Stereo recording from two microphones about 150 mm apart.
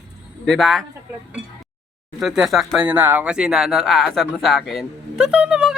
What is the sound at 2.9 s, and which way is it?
Speech, 10° right (ahead or behind).